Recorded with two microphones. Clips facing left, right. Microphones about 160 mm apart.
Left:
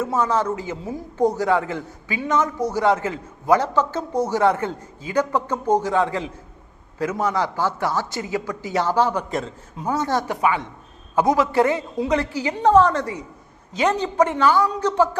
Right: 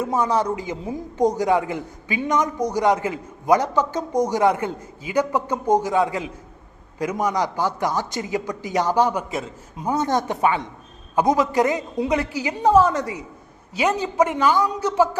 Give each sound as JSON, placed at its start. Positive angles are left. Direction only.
{"t": 0.0, "sound": "speech", "side_deg": -15}